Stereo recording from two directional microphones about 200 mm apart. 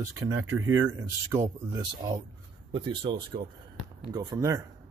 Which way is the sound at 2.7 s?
25° right (ahead or behind).